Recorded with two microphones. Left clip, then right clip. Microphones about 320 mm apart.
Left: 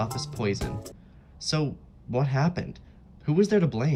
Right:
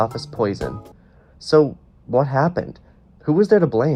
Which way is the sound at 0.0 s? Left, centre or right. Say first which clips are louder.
Right 10 dB; centre.